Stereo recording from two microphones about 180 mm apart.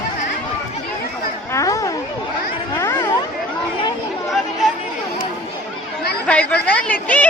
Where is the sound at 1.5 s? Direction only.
15° left (ahead or behind).